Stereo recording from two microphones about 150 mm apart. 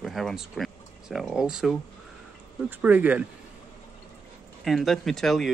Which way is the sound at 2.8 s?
10° right (ahead or behind).